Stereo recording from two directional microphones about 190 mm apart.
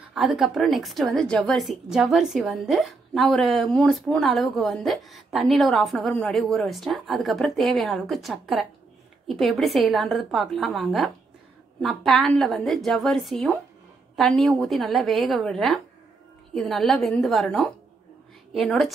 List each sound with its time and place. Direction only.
0.1 s a woman's voice: centre (ahead or behind)